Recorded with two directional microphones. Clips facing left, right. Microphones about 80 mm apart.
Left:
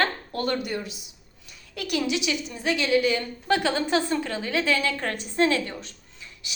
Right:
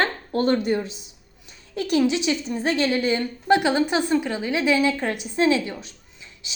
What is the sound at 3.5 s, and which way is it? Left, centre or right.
A woman's voice, centre.